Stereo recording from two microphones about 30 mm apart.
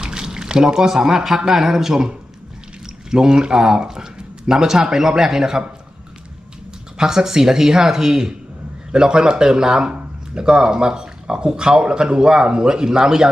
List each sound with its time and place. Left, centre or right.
0.0 s a sound: right
0.9 s speech: centre
1.9 s speech: right
7.0 s speech: centre